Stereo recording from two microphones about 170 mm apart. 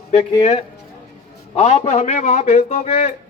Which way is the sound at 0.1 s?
40° left (ahead or behind).